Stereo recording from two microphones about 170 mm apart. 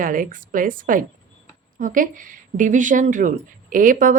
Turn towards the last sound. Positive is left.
turn(degrees=-50)  # may be behind; listen again after turning